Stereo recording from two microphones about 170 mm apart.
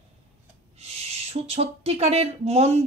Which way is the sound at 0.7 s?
40° right (ahead or behind).